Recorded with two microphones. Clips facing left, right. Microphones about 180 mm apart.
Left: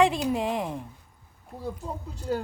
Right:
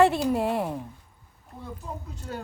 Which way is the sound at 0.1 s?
5° right (ahead or behind).